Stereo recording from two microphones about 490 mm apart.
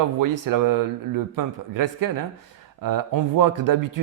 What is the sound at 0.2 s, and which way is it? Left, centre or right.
Speech, right.